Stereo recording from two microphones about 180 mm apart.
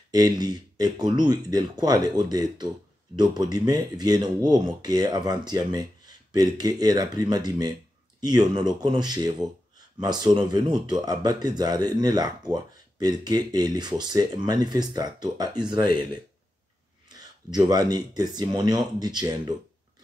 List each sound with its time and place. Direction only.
0.1 s speech: 20° right (ahead or behind)
17.1 s speech: 20° right (ahead or behind)